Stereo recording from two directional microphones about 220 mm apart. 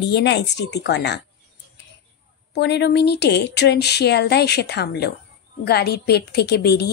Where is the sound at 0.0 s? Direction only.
50° left (ahead or behind).